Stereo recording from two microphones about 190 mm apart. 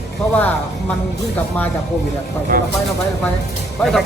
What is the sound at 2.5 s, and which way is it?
Speech, 50° right (ahead or behind).